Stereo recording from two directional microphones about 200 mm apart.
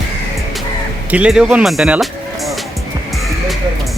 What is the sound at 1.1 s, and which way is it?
Speech, 5° right (ahead or behind).